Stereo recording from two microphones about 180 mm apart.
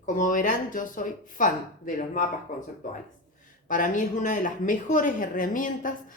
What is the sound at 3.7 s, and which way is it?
Speech, 45° left (ahead or behind).